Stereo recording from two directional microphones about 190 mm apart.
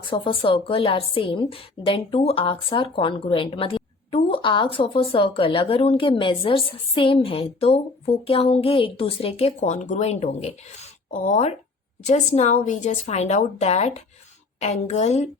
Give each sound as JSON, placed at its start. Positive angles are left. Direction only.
{"t": 0.1, "sound": "a woman's voice", "side_deg": 25}